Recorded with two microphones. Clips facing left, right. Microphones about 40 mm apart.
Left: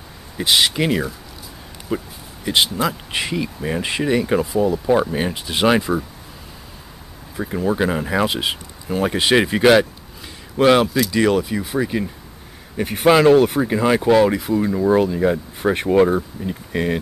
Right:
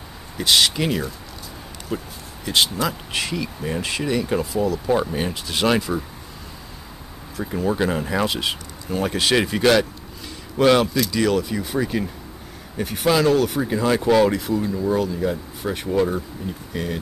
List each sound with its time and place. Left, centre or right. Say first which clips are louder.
0.4 s speech: left 1 dB; centre
7.3 s speech: left 2 dB; centre
12.9 s speech: left 6 dB; left; by 14.7 s centre
14.7 s speech: left 8 dB; left